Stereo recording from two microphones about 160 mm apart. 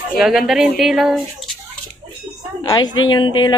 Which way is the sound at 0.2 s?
Centre (ahead or behind).